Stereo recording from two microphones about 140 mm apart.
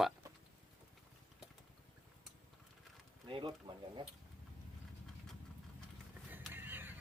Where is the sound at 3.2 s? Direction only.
35° right (ahead or behind).